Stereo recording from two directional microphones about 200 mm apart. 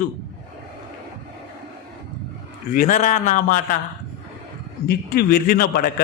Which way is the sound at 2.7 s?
40° left (ahead or behind).